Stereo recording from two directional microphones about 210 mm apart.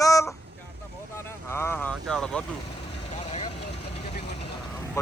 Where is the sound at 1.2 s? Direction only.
10° left (ahead or behind).